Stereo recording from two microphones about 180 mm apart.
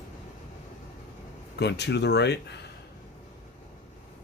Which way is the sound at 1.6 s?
70° left (ahead or behind).